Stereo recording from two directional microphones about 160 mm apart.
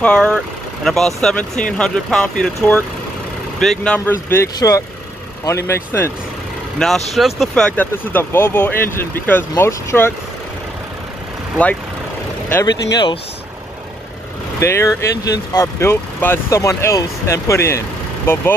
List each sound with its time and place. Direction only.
0.0 s speech: 5° left (ahead or behind)
6.8 s speech: 5° left (ahead or behind)
12.9 s speech: 30° left (ahead or behind)
14.6 s speech: 15° left (ahead or behind)